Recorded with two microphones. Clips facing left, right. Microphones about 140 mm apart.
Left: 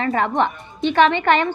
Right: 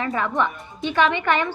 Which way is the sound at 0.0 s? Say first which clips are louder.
Left 4 dB; 65° left (ahead or behind).